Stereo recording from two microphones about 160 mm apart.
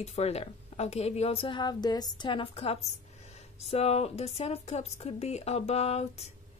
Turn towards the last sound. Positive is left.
turn(degrees=40)  # may be behind; listen again after turning